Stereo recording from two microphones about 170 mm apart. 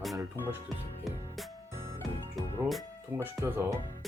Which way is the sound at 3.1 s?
10° right (ahead or behind).